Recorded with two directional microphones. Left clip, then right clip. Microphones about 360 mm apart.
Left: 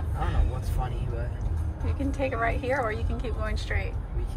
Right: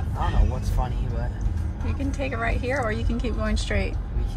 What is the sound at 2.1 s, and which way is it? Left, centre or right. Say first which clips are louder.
Speech: left 1 dB; centre.